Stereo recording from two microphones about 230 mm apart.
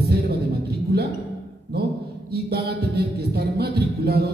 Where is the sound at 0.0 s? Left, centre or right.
Right.